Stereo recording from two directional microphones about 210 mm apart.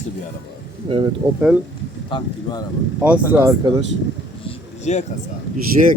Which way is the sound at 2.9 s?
5° right (ahead or behind).